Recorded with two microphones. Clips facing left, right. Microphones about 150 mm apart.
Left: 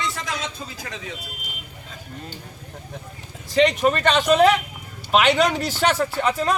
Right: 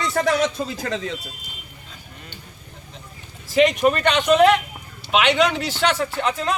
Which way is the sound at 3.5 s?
5° right (ahead or behind).